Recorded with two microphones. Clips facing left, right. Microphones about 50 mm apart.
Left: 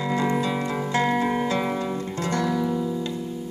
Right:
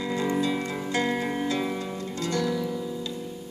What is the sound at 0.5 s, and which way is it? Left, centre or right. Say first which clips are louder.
Music: left 3 dB; left.